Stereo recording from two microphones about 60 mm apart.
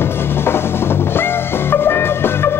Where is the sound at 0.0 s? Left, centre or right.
Left.